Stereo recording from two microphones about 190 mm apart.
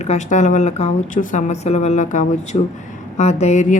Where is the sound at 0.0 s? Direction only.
35° left (ahead or behind).